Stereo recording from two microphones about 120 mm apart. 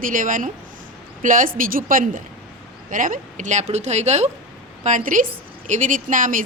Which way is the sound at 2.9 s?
90° right.